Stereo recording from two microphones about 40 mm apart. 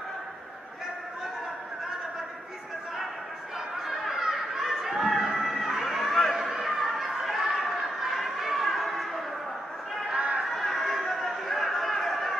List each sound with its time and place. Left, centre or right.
3.8 s a sound: centre
6.3 s chatter: centre
10.1 s chatter: right
10.5 s chatter: centre